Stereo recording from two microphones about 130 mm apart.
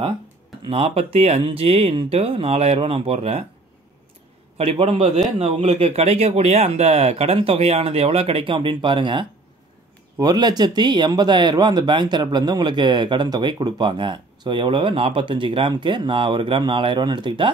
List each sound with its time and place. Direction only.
0.7 s speech: 50° right (ahead or behind)
4.6 s speech: 45° right (ahead or behind)